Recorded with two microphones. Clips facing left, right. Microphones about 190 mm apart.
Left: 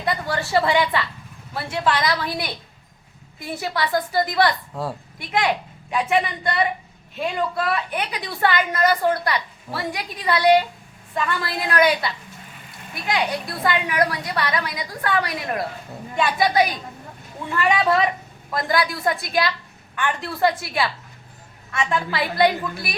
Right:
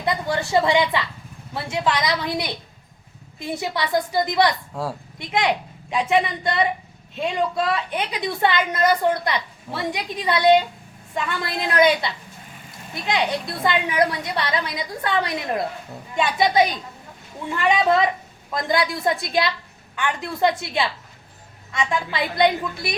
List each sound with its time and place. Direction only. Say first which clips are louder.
0.0 s a woman's voice: right 1 dB; 20° right (ahead or behind)
4.7 s speech: even; centre (ahead or behind)
5.2 s a woman's voice: even; 20° right (ahead or behind)